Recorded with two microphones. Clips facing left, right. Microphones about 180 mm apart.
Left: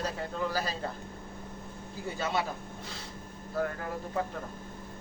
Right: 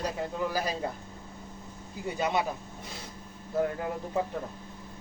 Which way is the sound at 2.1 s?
20° right (ahead or behind).